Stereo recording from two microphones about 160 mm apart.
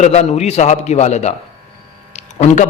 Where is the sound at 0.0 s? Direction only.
45° left (ahead or behind).